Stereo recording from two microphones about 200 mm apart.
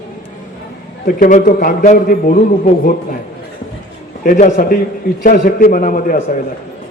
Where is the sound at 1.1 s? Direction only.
45° left (ahead or behind).